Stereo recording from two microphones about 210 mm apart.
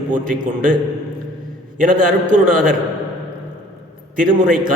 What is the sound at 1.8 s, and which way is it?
Speech, 40° right (ahead or behind).